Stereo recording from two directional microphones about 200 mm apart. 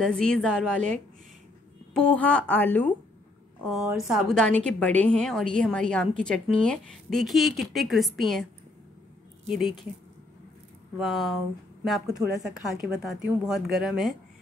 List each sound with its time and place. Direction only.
0.0 s a woman's voice: 5° left (ahead or behind)
4.1 s a woman's voice: centre (ahead or behind)
9.5 s a woman's voice: centre (ahead or behind)
11.0 s a woman's voice: centre (ahead or behind)